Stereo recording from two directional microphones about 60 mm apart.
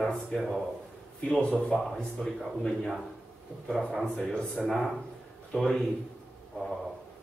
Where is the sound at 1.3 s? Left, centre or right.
Centre.